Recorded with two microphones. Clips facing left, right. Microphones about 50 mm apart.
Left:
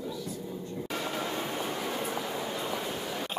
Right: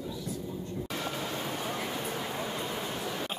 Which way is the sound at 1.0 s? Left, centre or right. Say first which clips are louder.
Left 3 dB; centre.